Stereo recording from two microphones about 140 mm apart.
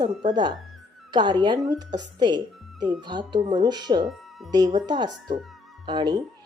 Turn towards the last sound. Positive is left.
turn(degrees=-30)  # may be behind; listen again after turning